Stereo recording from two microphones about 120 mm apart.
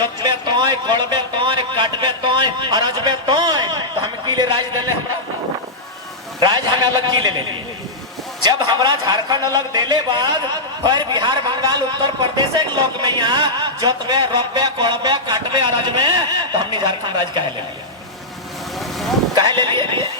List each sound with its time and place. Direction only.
0.0 s speech: 35° right (ahead or behind)
6.4 s a man's voice: 40° right (ahead or behind)
8.4 s a man's voice: 35° right (ahead or behind)
19.3 s speech: 35° right (ahead or behind)